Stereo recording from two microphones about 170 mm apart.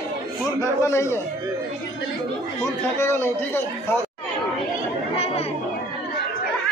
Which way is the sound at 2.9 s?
15° left (ahead or behind).